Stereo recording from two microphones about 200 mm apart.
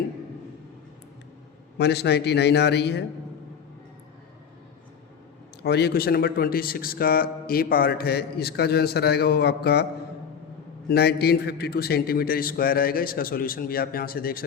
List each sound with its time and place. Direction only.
1.8 s a man's voice: 55° left (ahead or behind)
5.6 s a man's voice: 55° left (ahead or behind)
10.8 s a man's voice: 55° left (ahead or behind)